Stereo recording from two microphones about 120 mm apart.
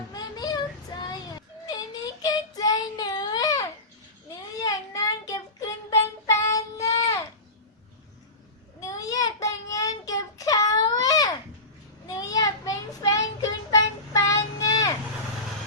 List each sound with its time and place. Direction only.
0.1 s child singing: 35° left (ahead or behind)
8.8 s child singing: 30° left (ahead or behind)